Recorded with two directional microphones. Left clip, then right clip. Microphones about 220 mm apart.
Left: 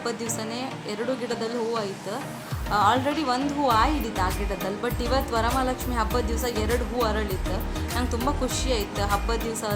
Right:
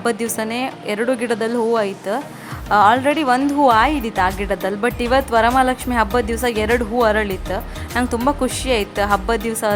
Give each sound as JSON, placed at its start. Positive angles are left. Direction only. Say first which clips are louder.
{"t": 0.0, "sound": "a woman's voice", "louder": "right 9 dB", "side_deg": -40}